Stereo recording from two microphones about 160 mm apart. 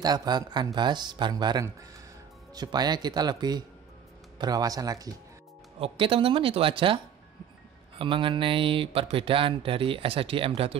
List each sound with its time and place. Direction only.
0.0 s speech: 25° right (ahead or behind)
5.8 s speech: 35° right (ahead or behind)
8.0 s speech: 30° right (ahead or behind)